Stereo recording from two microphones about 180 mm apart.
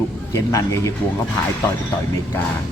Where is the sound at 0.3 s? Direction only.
20° left (ahead or behind).